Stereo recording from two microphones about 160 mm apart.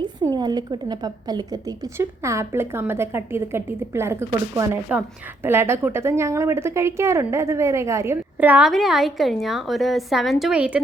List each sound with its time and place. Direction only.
0.3 s a woman's voice: 25° right (ahead or behind); by 10.8 s 10° right (ahead or behind)